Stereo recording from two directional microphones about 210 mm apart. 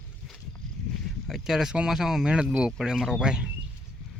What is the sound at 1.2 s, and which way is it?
Speech, centre (ahead or behind).